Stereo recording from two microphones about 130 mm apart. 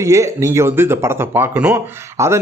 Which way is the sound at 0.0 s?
25° right (ahead or behind).